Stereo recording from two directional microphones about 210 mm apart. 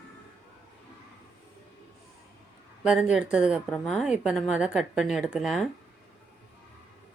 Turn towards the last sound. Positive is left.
turn(degrees=0)  # may be behind; listen again after turning